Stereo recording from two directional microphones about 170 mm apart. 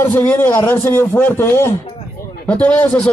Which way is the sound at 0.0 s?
10° left (ahead or behind).